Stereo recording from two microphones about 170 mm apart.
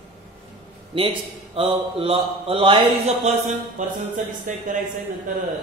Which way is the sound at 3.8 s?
45° right (ahead or behind).